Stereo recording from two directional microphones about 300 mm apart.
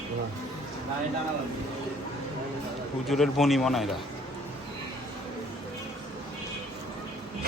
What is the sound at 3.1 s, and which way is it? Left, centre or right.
Speech, centre.